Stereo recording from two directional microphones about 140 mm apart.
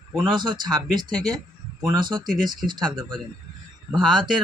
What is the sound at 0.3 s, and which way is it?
Speech, 35° right (ahead or behind).